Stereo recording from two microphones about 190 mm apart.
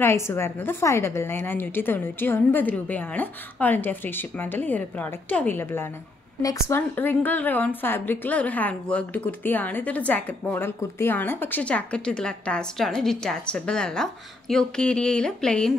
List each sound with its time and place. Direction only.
0.0 s a woman's voice: 15° left (ahead or behind)